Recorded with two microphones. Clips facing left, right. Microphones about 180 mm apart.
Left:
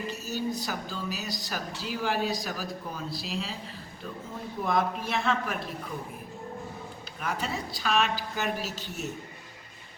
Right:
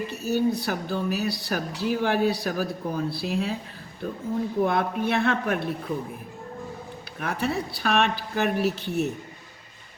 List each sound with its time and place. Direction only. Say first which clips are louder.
0.1 s a woman's voice: right 11 dB; 60° right (ahead or behind)
4.6 s a woman's voice: right 1 dB; 60° right (ahead or behind)
7.2 s a woman's voice: right 5 dB; 60° right (ahead or behind)